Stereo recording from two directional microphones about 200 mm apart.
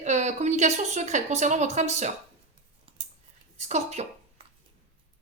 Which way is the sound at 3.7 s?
35° right (ahead or behind).